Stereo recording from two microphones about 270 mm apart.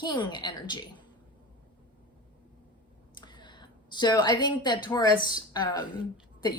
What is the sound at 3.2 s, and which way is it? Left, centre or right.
A woman's voice, centre.